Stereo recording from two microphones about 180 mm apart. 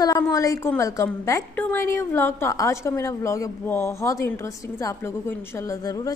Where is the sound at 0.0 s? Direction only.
20° left (ahead or behind).